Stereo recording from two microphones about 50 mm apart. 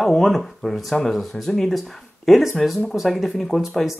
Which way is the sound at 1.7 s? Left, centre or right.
Centre.